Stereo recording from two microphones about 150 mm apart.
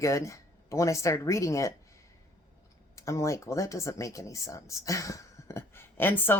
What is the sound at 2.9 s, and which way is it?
Speech, 20° left (ahead or behind).